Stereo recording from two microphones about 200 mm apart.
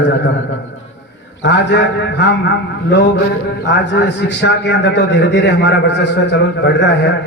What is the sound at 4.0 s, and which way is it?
A man's voice, 60° left (ahead or behind).